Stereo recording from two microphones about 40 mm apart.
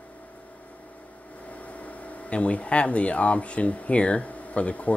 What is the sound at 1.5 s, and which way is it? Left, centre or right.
Speech, left.